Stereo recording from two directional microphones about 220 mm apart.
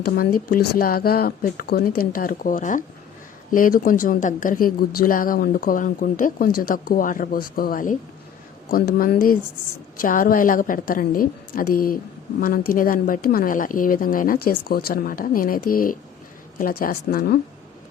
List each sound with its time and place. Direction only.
0.5 s speech: 45° left (ahead or behind)
9.0 s speech: 40° left (ahead or behind)